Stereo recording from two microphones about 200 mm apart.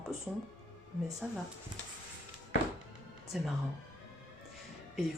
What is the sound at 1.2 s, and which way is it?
Speech, centre (ahead or behind).